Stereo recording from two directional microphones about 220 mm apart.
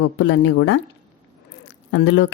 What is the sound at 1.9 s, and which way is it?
Speech, 55° left (ahead or behind).